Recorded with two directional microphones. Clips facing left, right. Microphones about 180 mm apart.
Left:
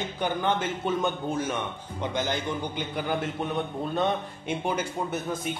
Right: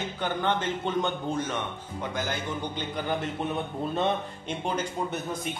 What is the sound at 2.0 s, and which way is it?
Speech, 20° left (ahead or behind).